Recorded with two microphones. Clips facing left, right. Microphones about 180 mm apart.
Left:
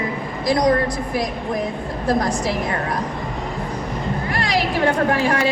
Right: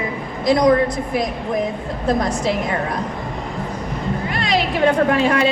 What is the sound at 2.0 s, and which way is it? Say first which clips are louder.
Speech: right 1 dB; 25° right (ahead or behind).